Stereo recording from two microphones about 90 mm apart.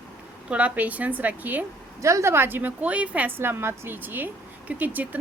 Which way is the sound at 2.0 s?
35° right (ahead or behind).